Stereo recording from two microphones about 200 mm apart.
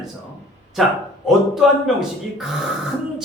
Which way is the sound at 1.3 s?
Centre (ahead or behind).